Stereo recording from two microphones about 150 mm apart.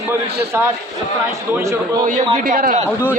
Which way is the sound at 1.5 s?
20° right (ahead or behind).